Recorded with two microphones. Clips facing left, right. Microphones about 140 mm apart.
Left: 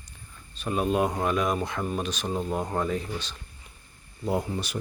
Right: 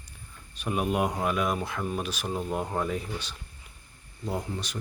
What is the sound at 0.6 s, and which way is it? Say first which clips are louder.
Speech: left 2 dB; 15° right (ahead or behind).